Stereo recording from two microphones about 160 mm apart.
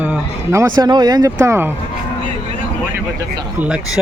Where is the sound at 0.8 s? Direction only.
25° right (ahead or behind).